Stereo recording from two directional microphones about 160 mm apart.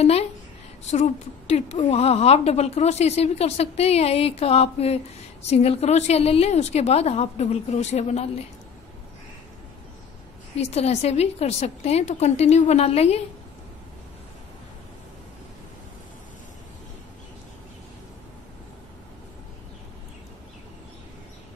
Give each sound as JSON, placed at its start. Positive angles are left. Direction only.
{"t": 0.0, "sound": "a woman's voice", "side_deg": 40}
{"t": 10.5, "sound": "a woman's voice", "side_deg": 40}